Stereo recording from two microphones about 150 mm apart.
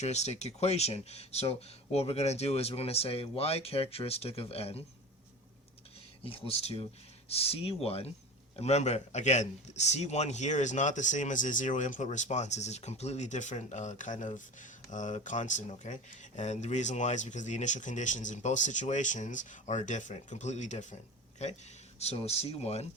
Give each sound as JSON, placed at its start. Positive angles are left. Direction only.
{"t": 0.0, "sound": "a man's voice", "side_deg": 50}
{"t": 6.2, "sound": "a man's voice", "side_deg": 40}